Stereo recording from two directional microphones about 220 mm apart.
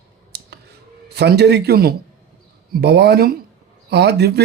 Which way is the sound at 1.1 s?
50° right (ahead or behind).